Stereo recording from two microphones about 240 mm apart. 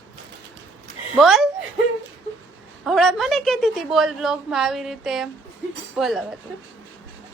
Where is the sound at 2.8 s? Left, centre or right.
Centre.